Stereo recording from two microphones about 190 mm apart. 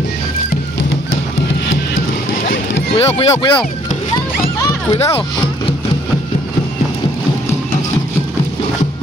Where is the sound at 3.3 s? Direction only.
25° left (ahead or behind).